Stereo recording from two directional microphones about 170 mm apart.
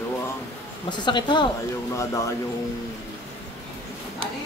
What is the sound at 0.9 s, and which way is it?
Speech, 25° left (ahead or behind).